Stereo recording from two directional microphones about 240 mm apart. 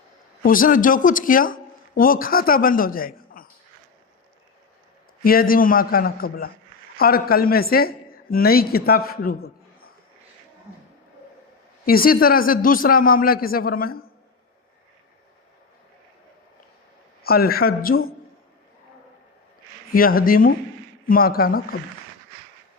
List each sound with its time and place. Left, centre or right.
0.4 s speech: left
5.2 s a woman's voice: left
11.9 s speech: left
17.2 s speech: left
19.9 s speech: left